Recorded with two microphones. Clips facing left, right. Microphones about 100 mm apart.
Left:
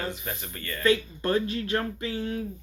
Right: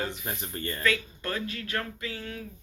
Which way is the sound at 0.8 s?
30° left (ahead or behind).